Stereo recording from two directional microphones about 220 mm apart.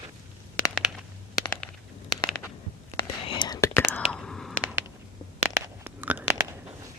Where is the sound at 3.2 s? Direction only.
20° left (ahead or behind).